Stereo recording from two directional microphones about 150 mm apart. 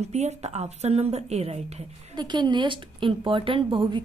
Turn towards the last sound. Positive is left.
turn(degrees=-30)  # may be behind; listen again after turning